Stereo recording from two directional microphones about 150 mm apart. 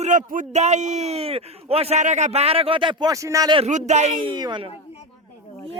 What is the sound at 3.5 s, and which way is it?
Speech, 50° right (ahead or behind).